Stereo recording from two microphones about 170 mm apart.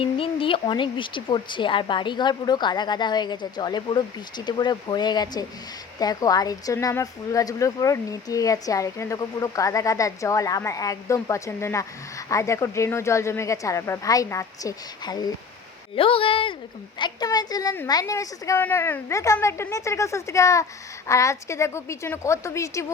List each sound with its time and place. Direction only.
0.0 s a woman's voice: 30° left (ahead or behind)